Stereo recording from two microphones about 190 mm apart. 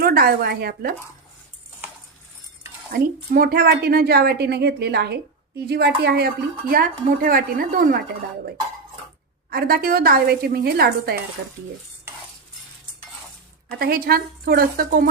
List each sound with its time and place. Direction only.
0.0 s speech: 55° right (ahead or behind)
2.9 s a woman's voice: 50° right (ahead or behind)
9.5 s speech: 55° right (ahead or behind)
13.7 s speech: 50° right (ahead or behind)